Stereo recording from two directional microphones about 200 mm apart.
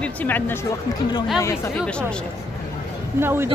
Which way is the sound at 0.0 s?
10° left (ahead or behind).